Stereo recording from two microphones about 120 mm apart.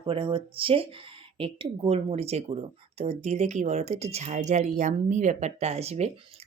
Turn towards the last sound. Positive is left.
turn(degrees=-65)  # may be behind; listen again after turning